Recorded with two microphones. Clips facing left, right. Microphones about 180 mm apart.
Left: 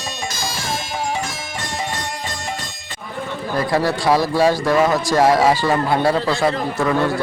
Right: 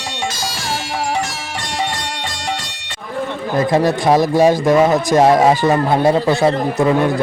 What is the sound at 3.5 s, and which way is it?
A man's voice, 20° right (ahead or behind).